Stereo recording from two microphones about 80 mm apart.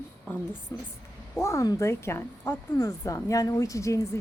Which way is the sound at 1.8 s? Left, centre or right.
Left.